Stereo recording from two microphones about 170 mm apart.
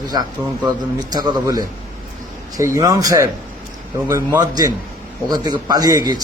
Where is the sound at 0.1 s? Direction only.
25° right (ahead or behind).